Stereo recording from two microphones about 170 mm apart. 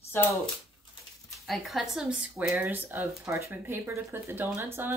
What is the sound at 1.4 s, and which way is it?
Speech, centre (ahead or behind).